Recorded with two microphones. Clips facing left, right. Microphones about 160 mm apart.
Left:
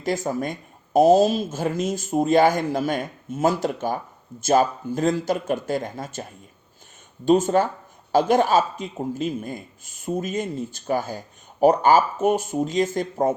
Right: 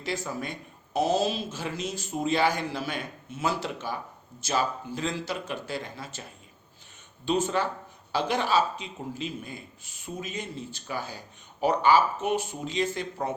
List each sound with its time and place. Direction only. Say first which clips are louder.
0.0 s speech: left 8 dB; 45° left (ahead or behind)
7.3 s speech: left 8 dB; 45° left (ahead or behind)